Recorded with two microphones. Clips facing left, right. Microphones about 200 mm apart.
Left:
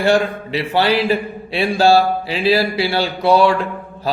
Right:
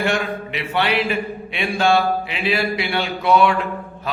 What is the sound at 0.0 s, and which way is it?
A man's voice, 35° left (ahead or behind).